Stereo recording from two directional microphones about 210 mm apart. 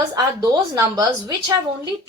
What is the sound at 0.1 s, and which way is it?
Speech, 15° right (ahead or behind).